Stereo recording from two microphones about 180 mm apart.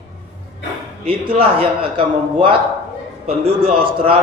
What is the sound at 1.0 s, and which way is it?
Speech, 30° right (ahead or behind).